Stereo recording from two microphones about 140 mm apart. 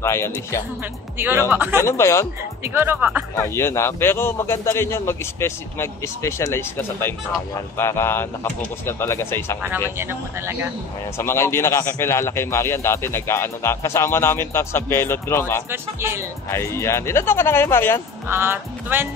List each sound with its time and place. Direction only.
0.0 s speech: 20° left (ahead or behind)
1.1 s speech: 15° right (ahead or behind)
1.8 s speech: 20° left (ahead or behind)
2.6 s speech: 15° right (ahead or behind)
3.4 s speech: 20° left (ahead or behind)
9.9 s speech: 15° right (ahead or behind)
11.1 s speech: 20° left (ahead or behind)
15.7 s speech: 15° right (ahead or behind)
16.5 s speech: 20° left (ahead or behind)
18.3 s speech: 15° right (ahead or behind)